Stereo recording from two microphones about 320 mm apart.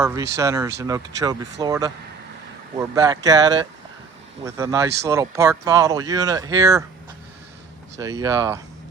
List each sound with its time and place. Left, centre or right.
0.0 s speech: centre
7.9 s speech: centre